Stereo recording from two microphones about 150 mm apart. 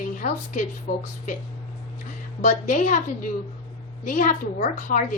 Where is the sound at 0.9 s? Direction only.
75° left (ahead or behind).